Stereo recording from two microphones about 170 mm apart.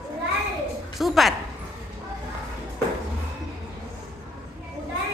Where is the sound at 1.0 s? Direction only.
Centre (ahead or behind).